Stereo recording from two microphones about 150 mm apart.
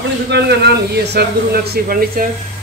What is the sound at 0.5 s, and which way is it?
Speech, 90° right.